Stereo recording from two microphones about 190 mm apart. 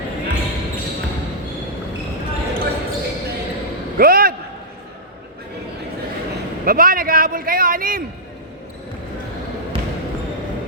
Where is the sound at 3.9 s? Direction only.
50° right (ahead or behind).